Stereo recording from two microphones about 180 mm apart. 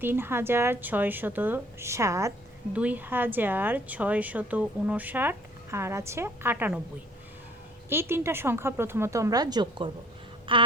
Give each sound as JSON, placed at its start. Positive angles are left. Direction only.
{"t": 0.0, "sound": "a woman's voice", "side_deg": -10}
{"t": 7.9, "sound": "a woman's voice", "side_deg": -15}
{"t": 10.5, "sound": "a sound", "side_deg": -30}